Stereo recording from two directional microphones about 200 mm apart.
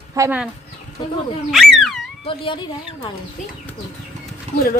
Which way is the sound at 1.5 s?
Centre (ahead or behind).